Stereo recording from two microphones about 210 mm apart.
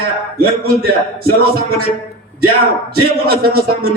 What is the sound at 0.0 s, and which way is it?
A man's voice, 45° right (ahead or behind).